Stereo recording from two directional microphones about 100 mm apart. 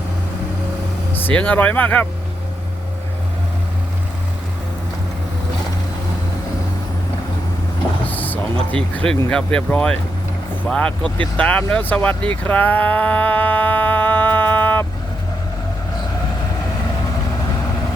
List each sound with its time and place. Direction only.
1.1 s speech: 15° left (ahead or behind)
8.0 s vehicle: 15° left (ahead or behind)
8.7 s speech: 10° left (ahead or behind)